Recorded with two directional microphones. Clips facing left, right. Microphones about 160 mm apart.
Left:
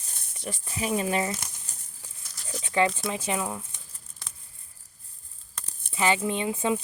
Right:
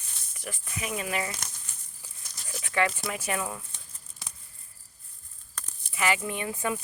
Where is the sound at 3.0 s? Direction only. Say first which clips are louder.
Left 2 dB; 25° left (ahead or behind).